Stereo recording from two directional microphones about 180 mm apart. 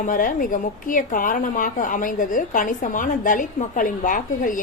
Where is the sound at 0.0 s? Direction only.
50° left (ahead or behind).